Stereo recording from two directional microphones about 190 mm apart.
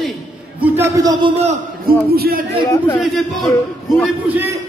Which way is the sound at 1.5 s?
50° right (ahead or behind).